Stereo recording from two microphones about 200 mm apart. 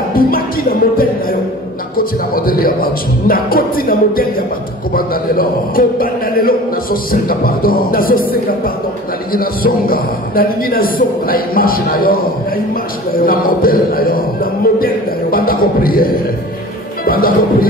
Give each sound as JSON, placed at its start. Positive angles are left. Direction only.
{"t": 0.1, "sound": "a man's voice", "side_deg": 45}